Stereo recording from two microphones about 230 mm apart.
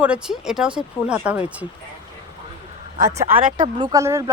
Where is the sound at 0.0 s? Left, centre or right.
Centre.